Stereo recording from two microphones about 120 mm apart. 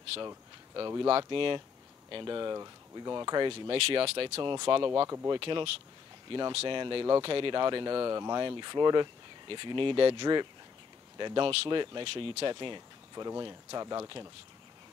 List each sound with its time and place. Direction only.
0.7 s speech: 35° right (ahead or behind)
1.0 s speech: 45° right (ahead or behind)
5.0 s speech: 25° right (ahead or behind)
5.3 s speech: 45° right (ahead or behind)
13.1 s speech: 30° right (ahead or behind)